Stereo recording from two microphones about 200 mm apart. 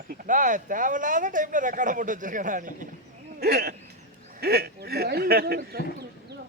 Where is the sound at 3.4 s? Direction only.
50° right (ahead or behind).